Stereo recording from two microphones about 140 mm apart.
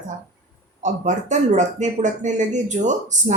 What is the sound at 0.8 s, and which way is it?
Speech, 60° right (ahead or behind).